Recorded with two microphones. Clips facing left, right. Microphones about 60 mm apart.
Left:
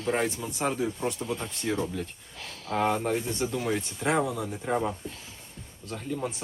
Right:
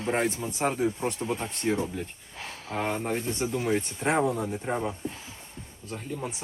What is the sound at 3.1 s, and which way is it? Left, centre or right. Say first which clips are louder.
Speech: left 1 dB; right.